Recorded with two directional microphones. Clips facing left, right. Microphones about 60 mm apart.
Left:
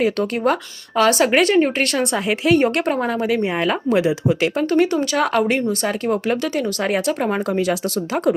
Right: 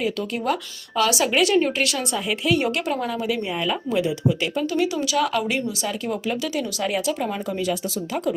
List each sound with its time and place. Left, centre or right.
0.0 s a woman's voice: left
0.9 s a woman's voice: left
2.9 s speech: left
3.2 s a woman's voice: left
7.6 s speech: left